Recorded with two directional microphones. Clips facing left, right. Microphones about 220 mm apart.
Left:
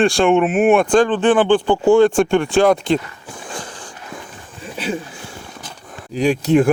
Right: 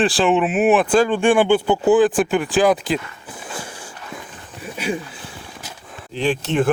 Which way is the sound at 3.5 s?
10° right (ahead or behind).